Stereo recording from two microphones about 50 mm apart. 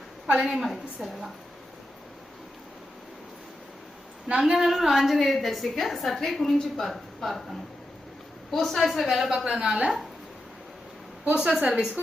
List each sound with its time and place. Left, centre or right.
0.3 s a woman's voice: centre
4.4 s a woman's voice: centre
8.4 s a woman's voice: centre
11.3 s a woman's voice: centre